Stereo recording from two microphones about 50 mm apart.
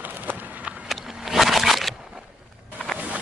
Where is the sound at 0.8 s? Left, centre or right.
Centre.